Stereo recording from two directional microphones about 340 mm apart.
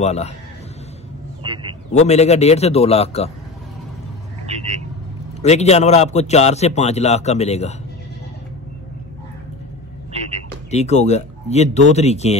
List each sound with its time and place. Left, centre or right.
0.0 s a man's voice: centre
1.4 s a sound: centre
2.0 s a man's voice: centre
4.5 s vehicle: centre
5.4 s a man's voice: centre
10.7 s a man's voice: centre